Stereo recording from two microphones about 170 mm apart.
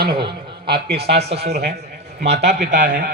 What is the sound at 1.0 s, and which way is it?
Speech, 80° right.